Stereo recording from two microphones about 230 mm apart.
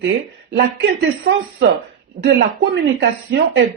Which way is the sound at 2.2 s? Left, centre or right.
Right.